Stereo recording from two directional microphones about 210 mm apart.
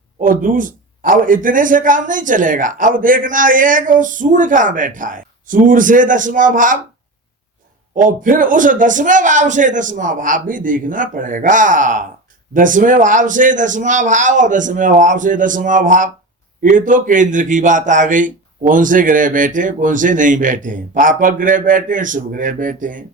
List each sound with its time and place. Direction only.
0.2 s a man's voice: 40° right (ahead or behind)
7.9 s a man's voice: 40° right (ahead or behind)